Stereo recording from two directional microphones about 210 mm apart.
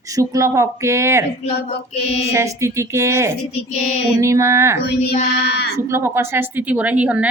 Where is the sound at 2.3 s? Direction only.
15° right (ahead or behind).